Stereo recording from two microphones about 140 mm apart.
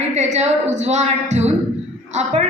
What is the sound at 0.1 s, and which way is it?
A woman's voice, 50° right (ahead or behind).